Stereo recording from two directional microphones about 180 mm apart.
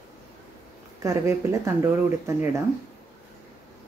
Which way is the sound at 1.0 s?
15° right (ahead or behind).